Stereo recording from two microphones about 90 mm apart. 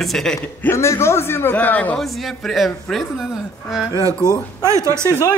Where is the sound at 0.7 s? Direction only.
30° left (ahead or behind).